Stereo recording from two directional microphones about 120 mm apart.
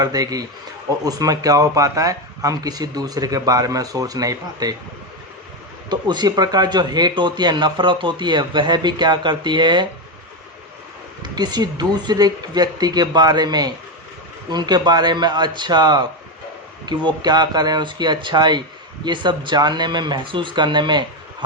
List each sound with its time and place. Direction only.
0.0 s speech: 30° right (ahead or behind)
5.9 s speech: 35° right (ahead or behind)
11.2 s speech: 35° right (ahead or behind)